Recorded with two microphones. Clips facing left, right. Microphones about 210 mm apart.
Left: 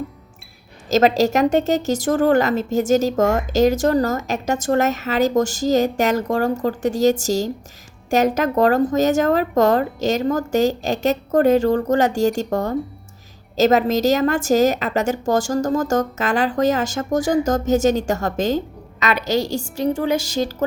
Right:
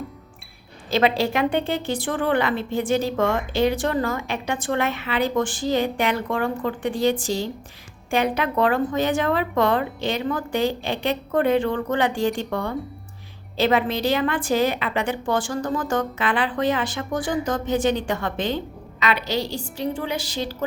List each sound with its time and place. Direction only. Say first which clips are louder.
0.9 s a woman's voice: left 5 dB; 45° left (ahead or behind)